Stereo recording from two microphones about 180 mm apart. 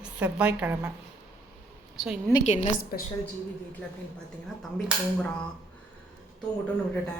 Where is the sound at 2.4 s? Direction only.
40° left (ahead or behind).